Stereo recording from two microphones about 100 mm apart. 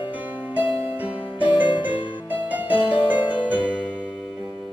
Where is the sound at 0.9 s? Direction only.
15° right (ahead or behind).